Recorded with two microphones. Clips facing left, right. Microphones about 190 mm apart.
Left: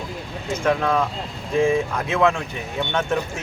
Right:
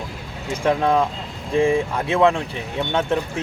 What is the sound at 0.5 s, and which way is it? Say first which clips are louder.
Speech: right 2 dB; 30° right (ahead or behind).